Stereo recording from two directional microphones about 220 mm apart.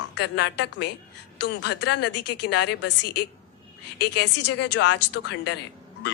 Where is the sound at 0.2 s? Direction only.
50° left (ahead or behind).